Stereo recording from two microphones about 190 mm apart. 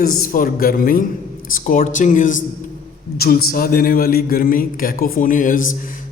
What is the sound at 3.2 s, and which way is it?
A man's voice, 55° left (ahead or behind).